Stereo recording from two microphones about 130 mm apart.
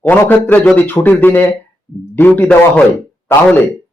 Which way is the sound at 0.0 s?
15° left (ahead or behind).